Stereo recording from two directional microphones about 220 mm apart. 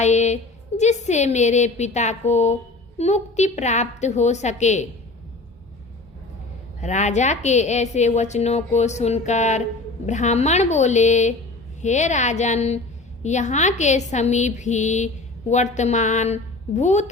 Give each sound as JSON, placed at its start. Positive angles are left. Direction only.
{"t": 0.0, "sound": "a sound", "side_deg": 30}
{"t": 0.8, "sound": "a woman's voice", "side_deg": 30}
{"t": 6.8, "sound": "a woman's voice", "side_deg": 35}